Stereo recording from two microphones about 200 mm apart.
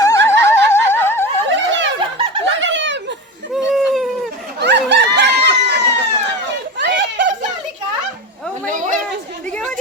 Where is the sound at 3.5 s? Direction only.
Centre (ahead or behind).